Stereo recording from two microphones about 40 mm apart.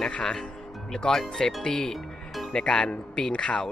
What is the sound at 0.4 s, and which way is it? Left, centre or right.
Speech, centre.